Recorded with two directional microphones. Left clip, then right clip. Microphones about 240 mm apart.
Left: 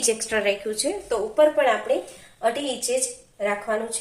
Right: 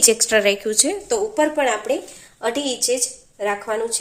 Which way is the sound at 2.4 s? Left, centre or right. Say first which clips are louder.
Right 2 dB; right.